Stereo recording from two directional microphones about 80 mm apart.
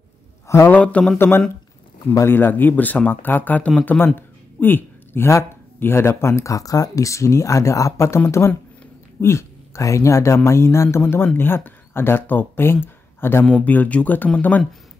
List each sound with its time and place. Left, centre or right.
0.7 s speech: centre